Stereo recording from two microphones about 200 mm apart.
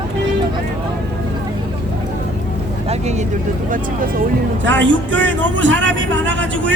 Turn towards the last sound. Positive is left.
turn(degrees=-65)  # may be behind; listen again after turning